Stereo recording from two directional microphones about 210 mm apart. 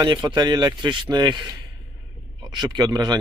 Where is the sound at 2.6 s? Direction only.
20° right (ahead or behind).